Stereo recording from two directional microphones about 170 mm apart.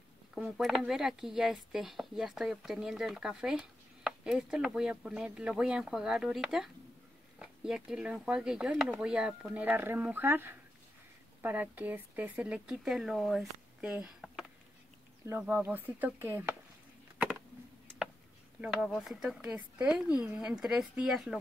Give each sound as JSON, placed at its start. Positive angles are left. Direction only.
{"t": 0.3, "sound": "speech", "side_deg": 0}
{"t": 18.6, "sound": "speech", "side_deg": 0}